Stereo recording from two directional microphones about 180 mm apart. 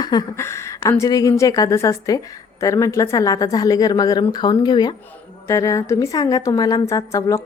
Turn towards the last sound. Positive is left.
turn(degrees=15)  # may be behind; listen again after turning